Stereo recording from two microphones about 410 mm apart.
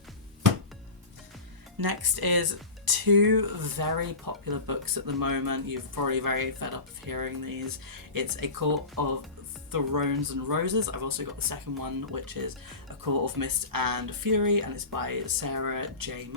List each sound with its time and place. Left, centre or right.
1.8 s speech: right